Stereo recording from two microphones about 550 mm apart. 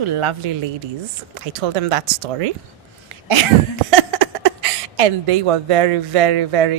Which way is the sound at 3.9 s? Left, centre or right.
Right.